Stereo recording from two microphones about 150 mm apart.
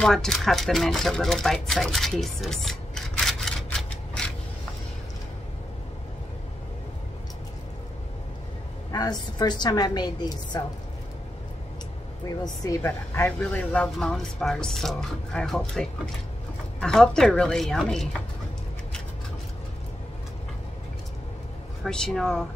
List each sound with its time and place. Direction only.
0.0 s speech: 5° left (ahead or behind)
4.2 s a sound: 10° left (ahead or behind)
8.9 s a woman's voice: 25° left (ahead or behind)
12.6 s speech: 20° left (ahead or behind); by 18.0 s 5° left (ahead or behind)
21.8 s speech: 5° left (ahead or behind)